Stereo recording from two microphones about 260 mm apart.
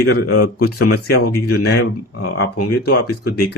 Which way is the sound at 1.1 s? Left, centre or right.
Left.